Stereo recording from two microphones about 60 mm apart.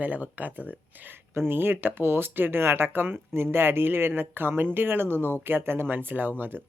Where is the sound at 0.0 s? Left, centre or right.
Right.